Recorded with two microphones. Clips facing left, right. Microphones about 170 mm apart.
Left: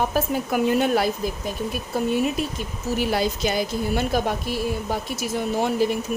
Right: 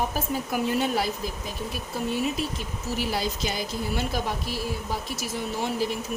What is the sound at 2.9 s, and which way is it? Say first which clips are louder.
Speech: left 6 dB; 55° left (ahead or behind).